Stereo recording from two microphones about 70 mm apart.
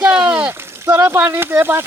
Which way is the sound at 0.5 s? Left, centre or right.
Right.